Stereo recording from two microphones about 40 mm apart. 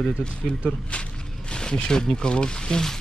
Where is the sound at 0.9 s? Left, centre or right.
Left.